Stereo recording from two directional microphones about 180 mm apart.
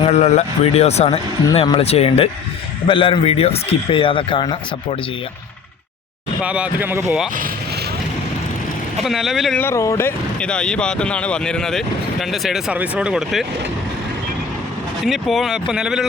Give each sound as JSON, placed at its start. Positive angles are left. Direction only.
{"t": 0.0, "sound": "speech", "side_deg": 35}
{"t": 6.4, "sound": "speech", "side_deg": -5}
{"t": 9.0, "sound": "speech", "side_deg": 0}
{"t": 9.6, "sound": "speech", "side_deg": 15}
{"t": 15.0, "sound": "speech", "side_deg": 0}